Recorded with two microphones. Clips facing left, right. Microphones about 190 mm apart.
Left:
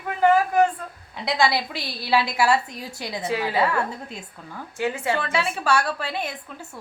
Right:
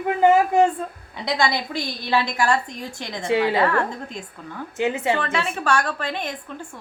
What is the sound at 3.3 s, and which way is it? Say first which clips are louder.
Speech: right 7 dB; 25° right (ahead or behind).